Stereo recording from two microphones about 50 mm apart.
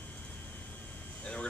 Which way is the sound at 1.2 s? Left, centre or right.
Left.